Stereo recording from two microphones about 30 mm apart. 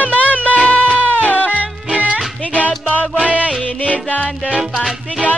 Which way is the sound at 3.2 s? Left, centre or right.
Right.